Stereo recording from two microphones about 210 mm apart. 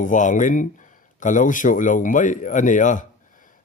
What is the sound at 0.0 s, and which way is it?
Speech, 35° left (ahead or behind).